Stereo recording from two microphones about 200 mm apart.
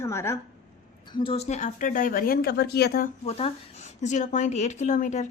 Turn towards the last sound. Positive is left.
turn(degrees=35)  # may be behind; listen again after turning